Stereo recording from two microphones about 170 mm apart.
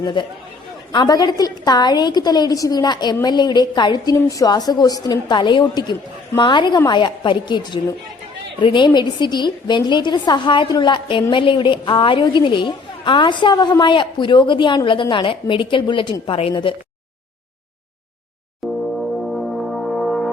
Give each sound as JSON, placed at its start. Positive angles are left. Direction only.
{"t": 0.0, "sound": "a woman's voice", "side_deg": 30}
{"t": 18.6, "sound": "brass instrument", "side_deg": 0}